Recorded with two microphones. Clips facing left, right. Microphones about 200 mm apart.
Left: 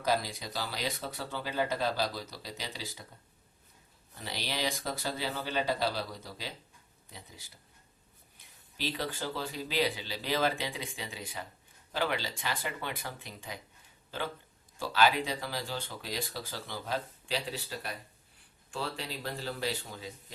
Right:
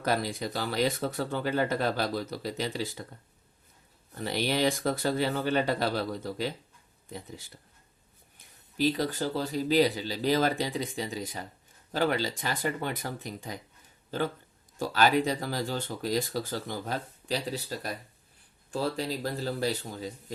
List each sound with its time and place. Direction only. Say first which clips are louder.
0.0 s speech: right 3 dB; 55° right (ahead or behind)
4.1 s speech: right 9 dB; 55° right (ahead or behind)
8.8 s speech: right 8 dB; 40° right (ahead or behind)
14.8 s speech: right 3 dB; 45° right (ahead or behind)